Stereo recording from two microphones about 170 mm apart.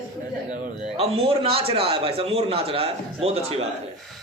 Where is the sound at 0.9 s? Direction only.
35° right (ahead or behind).